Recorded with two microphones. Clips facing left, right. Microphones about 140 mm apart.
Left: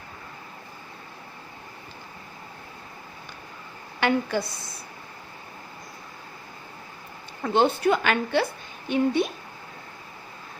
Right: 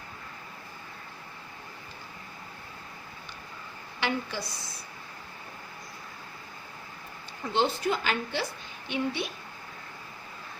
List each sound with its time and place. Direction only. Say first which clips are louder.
4.0 s a woman's voice: left 8 dB; 55° left (ahead or behind)
7.4 s a woman's voice: left 6 dB; 55° left (ahead or behind)
8.9 s a woman's voice: left 8 dB; 45° left (ahead or behind)